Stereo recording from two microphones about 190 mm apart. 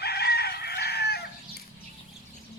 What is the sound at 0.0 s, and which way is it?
Chicken, 60° left (ahead or behind).